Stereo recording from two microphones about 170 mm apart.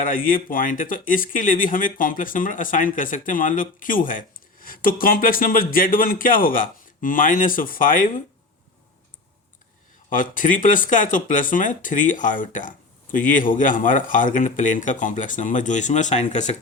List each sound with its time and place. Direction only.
0.0 s speech: 55° left (ahead or behind)
10.1 s speech: 50° left (ahead or behind)